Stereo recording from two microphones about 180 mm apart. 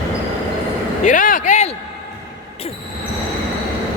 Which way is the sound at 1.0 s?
45° left (ahead or behind).